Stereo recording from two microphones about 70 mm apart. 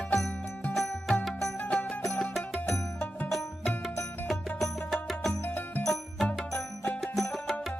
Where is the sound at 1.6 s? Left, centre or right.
Centre.